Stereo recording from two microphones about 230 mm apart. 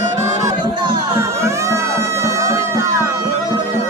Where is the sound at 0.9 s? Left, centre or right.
Centre.